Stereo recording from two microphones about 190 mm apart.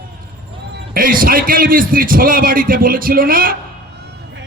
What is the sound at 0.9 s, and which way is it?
A man's voice, 45° right (ahead or behind).